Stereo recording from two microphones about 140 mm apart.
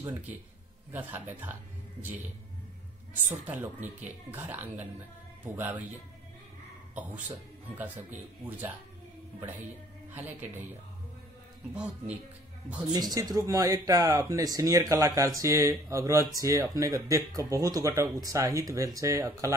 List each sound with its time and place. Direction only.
0.9 s speech: 15° right (ahead or behind)
3.3 s speech: 15° right (ahead or behind)
7.7 s speech: 10° right (ahead or behind)
10.1 s speech: 15° right (ahead or behind)
11.7 s speech: 10° right (ahead or behind)
12.9 s speech: 30° right (ahead or behind)